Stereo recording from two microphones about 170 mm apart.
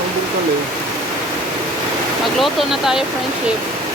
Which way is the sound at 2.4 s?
Centre (ahead or behind).